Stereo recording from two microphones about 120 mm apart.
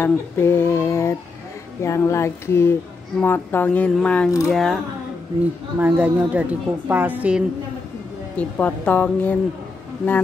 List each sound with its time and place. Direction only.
0.0 s female singing: 20° left (ahead or behind)
3.2 s speech: 15° left (ahead or behind); by 4.7 s centre (ahead or behind)
5.8 s a woman's voice: 15° right (ahead or behind)
8.4 s speech: 15° left (ahead or behind)